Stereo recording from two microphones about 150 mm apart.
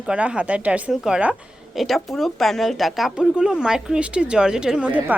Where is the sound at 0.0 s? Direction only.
10° right (ahead or behind).